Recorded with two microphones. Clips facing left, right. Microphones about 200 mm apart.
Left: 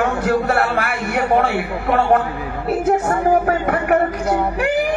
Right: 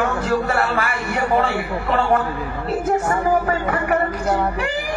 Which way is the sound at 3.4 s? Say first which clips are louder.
Left 3 dB; 60° left (ahead or behind).